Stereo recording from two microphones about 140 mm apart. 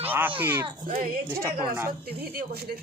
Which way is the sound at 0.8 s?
80° right.